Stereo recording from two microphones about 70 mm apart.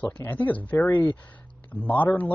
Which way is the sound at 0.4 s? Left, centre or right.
Left.